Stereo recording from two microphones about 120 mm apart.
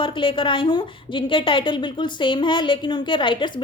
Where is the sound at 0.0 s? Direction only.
45° left (ahead or behind).